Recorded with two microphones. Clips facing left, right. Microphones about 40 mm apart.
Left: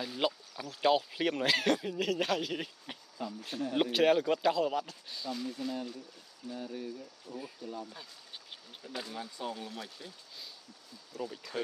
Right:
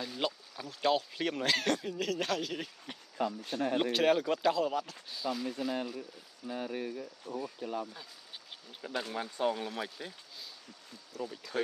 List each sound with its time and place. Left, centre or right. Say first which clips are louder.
0.0 s speech: left 2 dB; centre
3.2 s speech: right 7 dB; right
3.7 s speech: left 2 dB; centre
5.6 s speech: right 3 dB; centre
6.4 s speech: right 3 dB; right
9.1 s speech: right 10 dB; right
11.1 s speech: even; centre